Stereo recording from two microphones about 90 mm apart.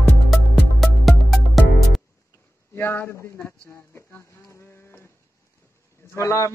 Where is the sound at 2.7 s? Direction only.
25° left (ahead or behind).